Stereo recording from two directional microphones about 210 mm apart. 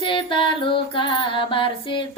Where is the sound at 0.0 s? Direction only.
25° left (ahead or behind).